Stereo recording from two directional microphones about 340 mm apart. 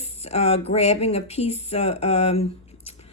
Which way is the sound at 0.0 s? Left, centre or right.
Centre.